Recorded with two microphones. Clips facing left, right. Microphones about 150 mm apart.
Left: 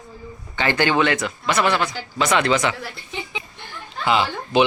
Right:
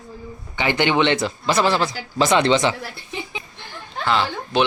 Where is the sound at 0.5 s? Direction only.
15° right (ahead or behind).